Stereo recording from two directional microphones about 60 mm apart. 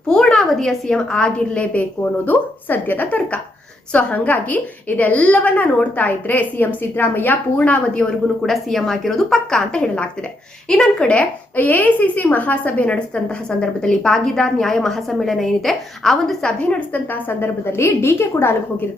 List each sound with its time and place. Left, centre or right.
0.1 s a woman's voice: centre
8.4 s speech: centre
16.9 s a woman's voice: left